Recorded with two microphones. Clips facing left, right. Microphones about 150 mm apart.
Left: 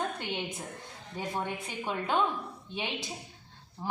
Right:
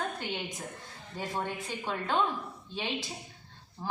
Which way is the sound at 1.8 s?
15° left (ahead or behind).